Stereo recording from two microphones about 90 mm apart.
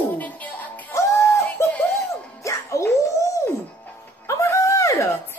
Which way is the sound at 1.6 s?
30° left (ahead or behind).